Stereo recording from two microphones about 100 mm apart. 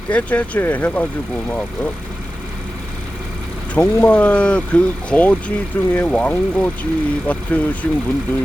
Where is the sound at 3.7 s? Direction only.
20° left (ahead or behind).